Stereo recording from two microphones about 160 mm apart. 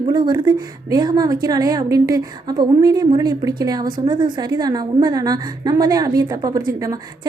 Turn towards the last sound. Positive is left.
turn(degrees=-20)  # may be behind; listen again after turning